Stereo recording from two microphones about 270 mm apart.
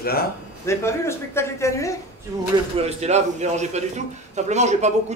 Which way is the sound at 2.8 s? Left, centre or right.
Right.